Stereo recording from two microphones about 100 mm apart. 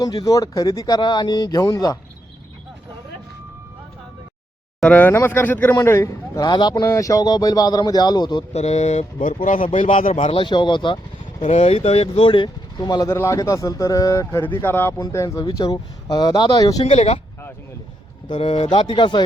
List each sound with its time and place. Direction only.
0.0 s a man's voice: 40° left (ahead or behind)
4.8 s a man's voice: 15° left (ahead or behind)
5.7 s a man's voice: 30° left (ahead or behind)
6.5 s a man's voice: 45° left (ahead or behind)
8.5 s speech: 90° left
10.2 s speech: 55° left (ahead or behind)
11.6 s speech: 90° left; by 13.1 s 45° left (ahead or behind)
13.1 s a man's voice: 25° left (ahead or behind); by 16.6 s 50° left (ahead or behind)
16.6 s a man's voice: 35° left (ahead or behind)
16.8 s speech: 85° left
18.6 s speech: 55° left (ahead or behind)